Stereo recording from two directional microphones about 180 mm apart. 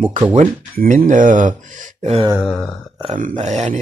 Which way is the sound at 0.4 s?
45° right (ahead or behind).